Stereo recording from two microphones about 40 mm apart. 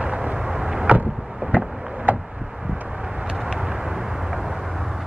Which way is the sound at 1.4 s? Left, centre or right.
Right.